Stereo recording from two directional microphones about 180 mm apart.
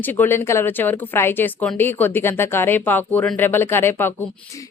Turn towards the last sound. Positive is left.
turn(degrees=10)  # may be behind; listen again after turning